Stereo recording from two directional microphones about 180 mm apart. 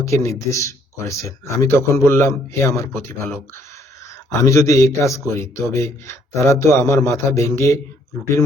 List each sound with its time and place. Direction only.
0.0 s speech: 15° left (ahead or behind)